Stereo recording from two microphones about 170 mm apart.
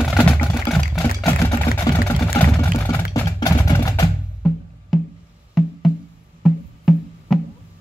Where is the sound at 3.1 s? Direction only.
20° left (ahead or behind).